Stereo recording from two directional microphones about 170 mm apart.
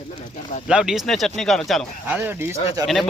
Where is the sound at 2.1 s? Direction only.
15° right (ahead or behind).